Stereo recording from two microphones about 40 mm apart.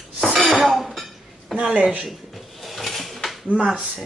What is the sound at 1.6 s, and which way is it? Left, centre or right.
Speech, centre.